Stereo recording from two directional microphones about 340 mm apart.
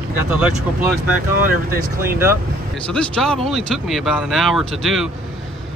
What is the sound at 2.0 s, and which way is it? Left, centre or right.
Speech, centre.